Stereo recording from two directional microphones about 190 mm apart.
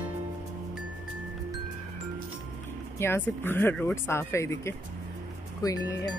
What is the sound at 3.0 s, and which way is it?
Speech, 10° left (ahead or behind).